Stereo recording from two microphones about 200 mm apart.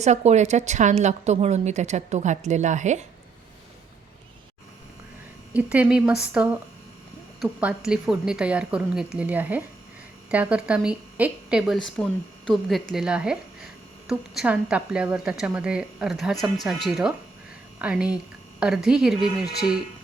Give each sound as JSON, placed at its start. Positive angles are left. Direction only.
{"t": 0.0, "sound": "a woman's voice", "side_deg": -35}
{"t": 5.5, "sound": "a woman's voice", "side_deg": -5}